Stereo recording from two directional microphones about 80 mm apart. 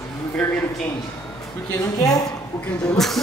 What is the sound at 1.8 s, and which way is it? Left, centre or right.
Speech, left.